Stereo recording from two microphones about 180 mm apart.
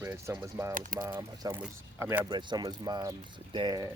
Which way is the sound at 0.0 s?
15° right (ahead or behind).